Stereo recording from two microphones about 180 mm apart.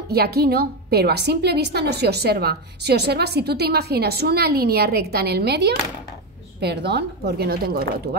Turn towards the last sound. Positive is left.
turn(degrees=-60)  # may be behind; listen again after turning